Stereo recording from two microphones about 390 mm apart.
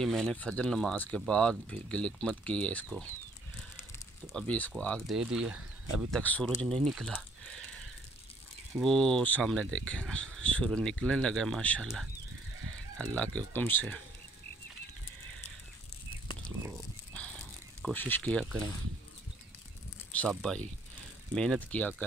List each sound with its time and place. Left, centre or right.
0.0 s speech: centre
4.3 s speech: centre
8.7 s speech: centre
17.1 s a sound: centre
17.8 s speech: centre
20.1 s speech: centre